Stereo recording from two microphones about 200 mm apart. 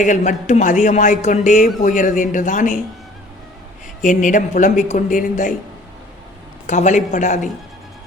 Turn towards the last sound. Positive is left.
turn(degrees=40)  # may be behind; listen again after turning